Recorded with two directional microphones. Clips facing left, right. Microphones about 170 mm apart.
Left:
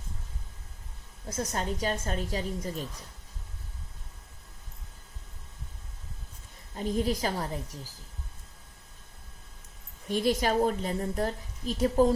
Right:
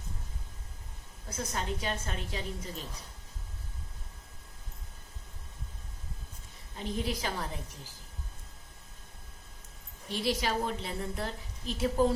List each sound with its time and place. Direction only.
1.3 s a woman's voice: 40° left (ahead or behind)
6.7 s a woman's voice: 40° left (ahead or behind)
10.1 s a woman's voice: 45° left (ahead or behind)